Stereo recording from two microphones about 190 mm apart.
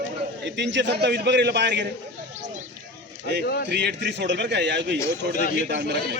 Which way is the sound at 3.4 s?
55° left (ahead or behind).